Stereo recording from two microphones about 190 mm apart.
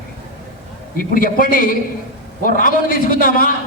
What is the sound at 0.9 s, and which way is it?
A man's voice, 45° left (ahead or behind).